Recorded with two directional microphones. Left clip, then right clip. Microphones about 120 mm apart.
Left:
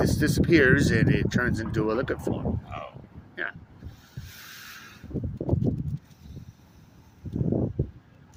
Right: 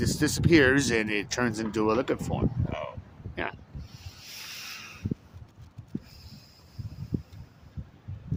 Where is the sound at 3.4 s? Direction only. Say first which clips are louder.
Left 1 dB; 40° right (ahead or behind).